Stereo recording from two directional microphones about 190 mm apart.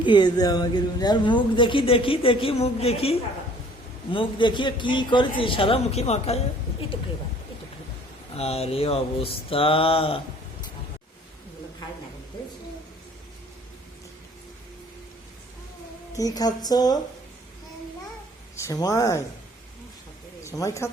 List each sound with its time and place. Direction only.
0.0 s speech: 25° left (ahead or behind)
8.4 s speech: 30° left (ahead or behind)
16.1 s speech: 20° left (ahead or behind)
18.5 s speech: 15° left (ahead or behind)
20.4 s speech: 15° left (ahead or behind)